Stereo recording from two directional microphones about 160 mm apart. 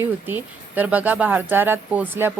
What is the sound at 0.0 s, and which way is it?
Speech, 10° right (ahead or behind).